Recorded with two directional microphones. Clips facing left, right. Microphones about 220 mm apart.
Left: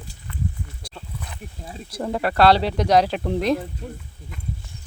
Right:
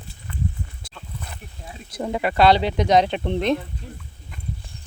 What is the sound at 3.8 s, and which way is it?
Speech, 55° left (ahead or behind).